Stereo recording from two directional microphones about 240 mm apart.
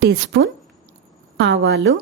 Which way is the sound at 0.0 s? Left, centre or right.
Right.